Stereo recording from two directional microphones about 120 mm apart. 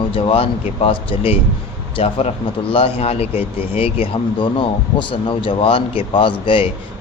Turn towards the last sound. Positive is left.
turn(degrees=45)  # may be behind; listen again after turning